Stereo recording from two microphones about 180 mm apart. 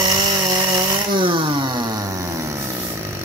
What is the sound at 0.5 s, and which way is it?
Chainsaw, 25° right (ahead or behind).